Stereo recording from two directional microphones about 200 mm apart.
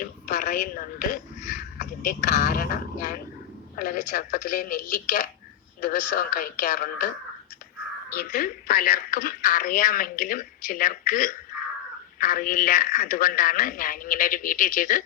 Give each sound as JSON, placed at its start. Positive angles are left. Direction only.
{"t": 0.0, "sound": "speech", "side_deg": 40}
{"t": 8.1, "sound": "speech", "side_deg": 50}